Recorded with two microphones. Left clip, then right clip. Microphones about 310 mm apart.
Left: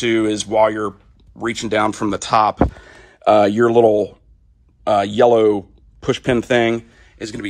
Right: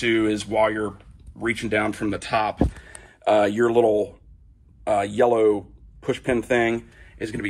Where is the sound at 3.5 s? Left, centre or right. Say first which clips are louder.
Left 6 dB; left.